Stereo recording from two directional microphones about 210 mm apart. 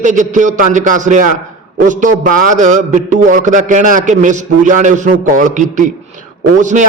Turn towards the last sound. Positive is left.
turn(degrees=-35)  # may be behind; listen again after turning